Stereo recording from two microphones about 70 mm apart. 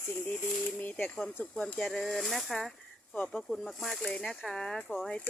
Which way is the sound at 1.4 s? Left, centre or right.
Left.